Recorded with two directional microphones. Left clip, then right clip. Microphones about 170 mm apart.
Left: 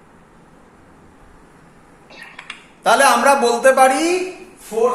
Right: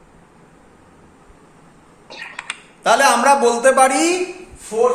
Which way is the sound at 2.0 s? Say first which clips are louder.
Right 5 dB; 55° right (ahead or behind).